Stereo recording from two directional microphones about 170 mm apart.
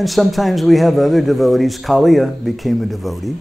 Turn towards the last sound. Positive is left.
turn(degrees=0)  # may be behind; listen again after turning